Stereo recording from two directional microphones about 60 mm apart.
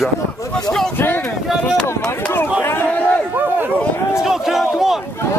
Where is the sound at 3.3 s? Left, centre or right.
Right.